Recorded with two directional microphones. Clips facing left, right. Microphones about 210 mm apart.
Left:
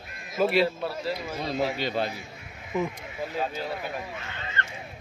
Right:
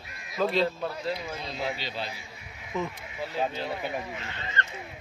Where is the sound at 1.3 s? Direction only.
50° left (ahead or behind).